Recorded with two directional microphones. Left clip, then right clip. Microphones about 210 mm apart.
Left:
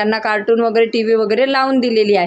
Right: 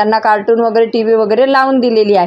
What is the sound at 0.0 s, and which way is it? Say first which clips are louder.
Speech: right 6 dB; 10° right (ahead or behind).